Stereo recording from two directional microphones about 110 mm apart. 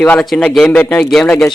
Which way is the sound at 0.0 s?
10° left (ahead or behind).